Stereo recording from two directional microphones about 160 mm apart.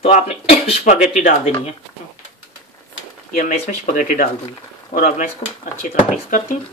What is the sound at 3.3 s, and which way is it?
Speech, 45° left (ahead or behind).